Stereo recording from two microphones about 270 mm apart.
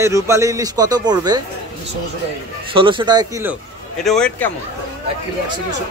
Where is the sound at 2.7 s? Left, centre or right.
Centre.